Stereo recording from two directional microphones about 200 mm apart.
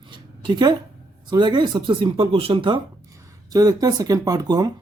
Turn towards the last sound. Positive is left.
turn(degrees=-20)  # may be behind; listen again after turning